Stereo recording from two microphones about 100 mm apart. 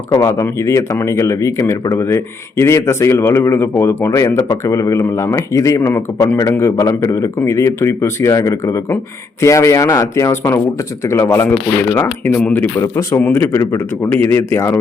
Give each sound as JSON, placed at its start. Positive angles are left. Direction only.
{"t": 0.1, "sound": "a man's voice", "side_deg": 30}
{"t": 12.4, "sound": "speech", "side_deg": 10}
{"t": 12.8, "sound": "a man's voice", "side_deg": 30}